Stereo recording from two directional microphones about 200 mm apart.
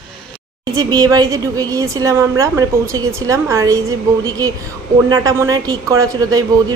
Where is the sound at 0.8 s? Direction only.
20° right (ahead or behind).